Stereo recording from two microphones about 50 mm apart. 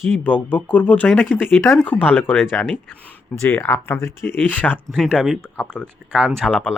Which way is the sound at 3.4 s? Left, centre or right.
Left.